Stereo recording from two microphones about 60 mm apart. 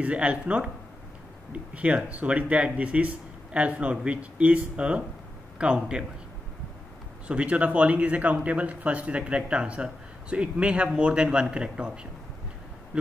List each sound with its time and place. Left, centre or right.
0.0 s a man's voice: right
7.2 s a man's voice: right